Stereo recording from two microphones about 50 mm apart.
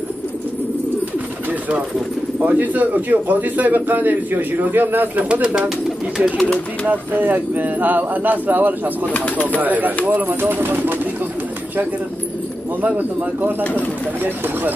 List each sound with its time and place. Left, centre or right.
2.4 s speech: right
5.3 s speech: right
6.9 s speech: right
9.1 s speech: left
9.6 s speech: right
12.8 s speech: right